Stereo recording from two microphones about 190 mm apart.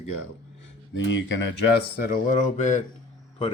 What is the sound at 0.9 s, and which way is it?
Speech, 70° left (ahead or behind).